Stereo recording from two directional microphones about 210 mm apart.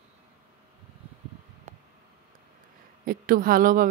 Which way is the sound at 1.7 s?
35° right (ahead or behind).